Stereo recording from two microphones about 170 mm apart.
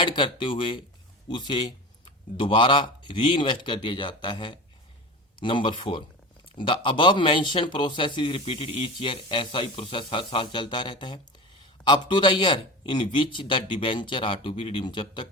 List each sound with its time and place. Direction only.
0.0 s speech: 30° left (ahead or behind)